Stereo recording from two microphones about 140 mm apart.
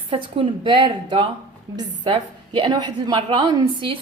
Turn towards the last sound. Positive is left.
turn(degrees=-35)  # may be behind; listen again after turning